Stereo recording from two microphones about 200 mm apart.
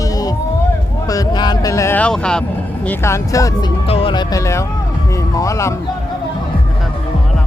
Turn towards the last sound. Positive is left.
turn(degrees=15)  # may be behind; listen again after turning